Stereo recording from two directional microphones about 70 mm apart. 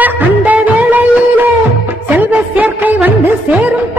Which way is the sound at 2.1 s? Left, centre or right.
Right.